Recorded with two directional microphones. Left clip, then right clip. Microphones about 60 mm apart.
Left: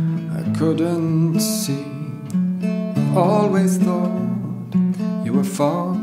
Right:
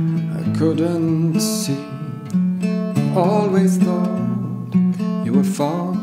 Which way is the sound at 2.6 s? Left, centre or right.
Right.